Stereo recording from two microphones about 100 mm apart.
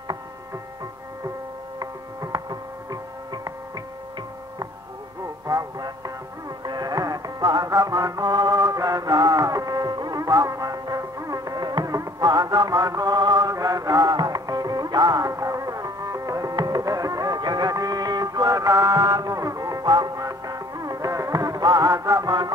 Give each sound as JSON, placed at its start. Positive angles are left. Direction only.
{"t": 1.8, "sound": "music", "side_deg": -40}
{"t": 5.5, "sound": "music", "side_deg": -35}